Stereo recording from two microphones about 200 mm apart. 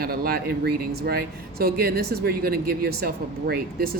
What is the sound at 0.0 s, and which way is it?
Speech, 50° right (ahead or behind).